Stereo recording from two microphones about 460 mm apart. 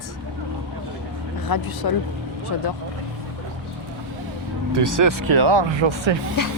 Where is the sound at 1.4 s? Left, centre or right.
Left.